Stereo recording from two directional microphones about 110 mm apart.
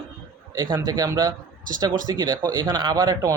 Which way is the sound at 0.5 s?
40° right (ahead or behind).